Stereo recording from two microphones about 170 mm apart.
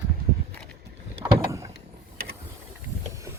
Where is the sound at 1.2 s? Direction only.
15° right (ahead or behind).